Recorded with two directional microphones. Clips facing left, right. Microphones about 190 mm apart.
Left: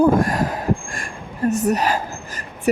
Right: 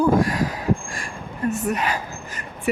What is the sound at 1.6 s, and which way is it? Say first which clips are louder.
Speech: left 5 dB; 40° left (ahead or behind).